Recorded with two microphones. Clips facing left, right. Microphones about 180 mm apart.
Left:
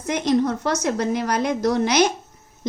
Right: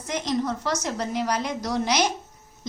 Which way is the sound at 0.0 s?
65° left (ahead or behind).